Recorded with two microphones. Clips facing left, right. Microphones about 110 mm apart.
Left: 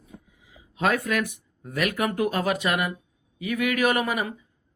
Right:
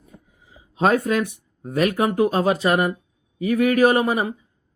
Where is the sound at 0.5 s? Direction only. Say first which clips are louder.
Right 6 dB; 30° right (ahead or behind).